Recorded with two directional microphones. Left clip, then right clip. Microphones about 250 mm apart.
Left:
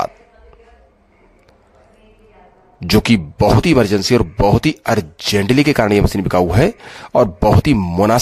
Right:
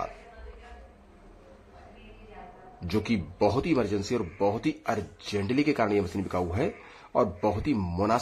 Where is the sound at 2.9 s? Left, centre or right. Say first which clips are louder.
Left 15 dB; left.